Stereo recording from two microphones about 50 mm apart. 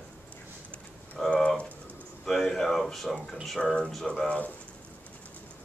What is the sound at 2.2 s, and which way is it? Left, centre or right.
Speech, centre.